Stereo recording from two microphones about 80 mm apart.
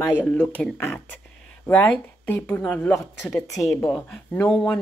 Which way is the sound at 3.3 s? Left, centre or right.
Left.